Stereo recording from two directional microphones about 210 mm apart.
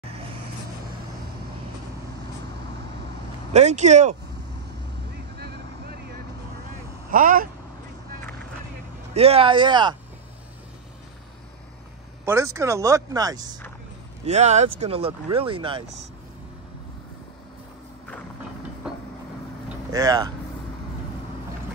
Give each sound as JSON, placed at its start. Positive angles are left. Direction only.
{"t": 3.5, "sound": "speech", "side_deg": -35}
{"t": 7.1, "sound": "speech", "side_deg": -40}
{"t": 9.1, "sound": "speech", "side_deg": -30}
{"t": 12.3, "sound": "speech", "side_deg": -15}
{"t": 14.2, "sound": "speech", "side_deg": -35}
{"t": 19.9, "sound": "speech", "side_deg": -20}